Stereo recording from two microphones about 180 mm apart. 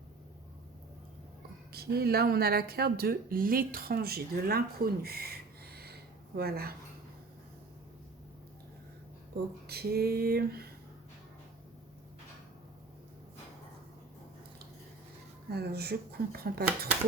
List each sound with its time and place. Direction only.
1.7 s speech: 60° right (ahead or behind)
9.6 s speech: 60° right (ahead or behind)
15.4 s speech: 60° right (ahead or behind)